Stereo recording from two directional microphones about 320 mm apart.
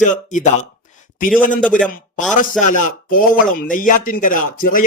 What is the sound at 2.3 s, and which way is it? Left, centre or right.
Speech, left.